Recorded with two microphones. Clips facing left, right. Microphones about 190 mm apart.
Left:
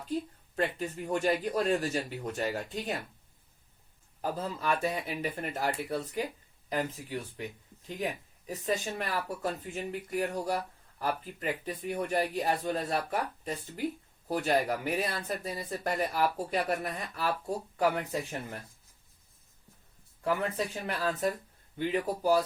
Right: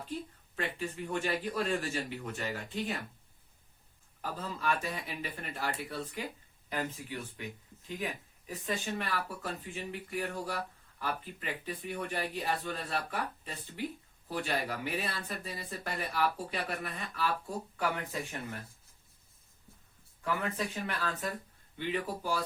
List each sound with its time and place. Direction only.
0.5 s speech: 40° left (ahead or behind)
4.2 s speech: 40° left (ahead or behind)
20.2 s speech: 35° left (ahead or behind)